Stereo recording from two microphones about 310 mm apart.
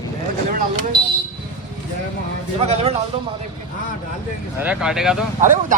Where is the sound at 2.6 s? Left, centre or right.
Right.